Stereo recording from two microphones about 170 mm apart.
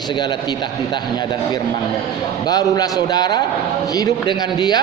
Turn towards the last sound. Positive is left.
turn(degrees=25)  # may be behind; listen again after turning